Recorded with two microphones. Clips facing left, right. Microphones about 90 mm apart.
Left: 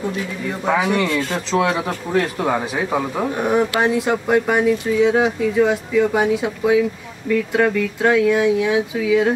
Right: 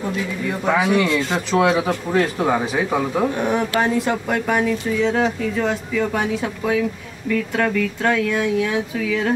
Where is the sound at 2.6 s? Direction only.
5° left (ahead or behind).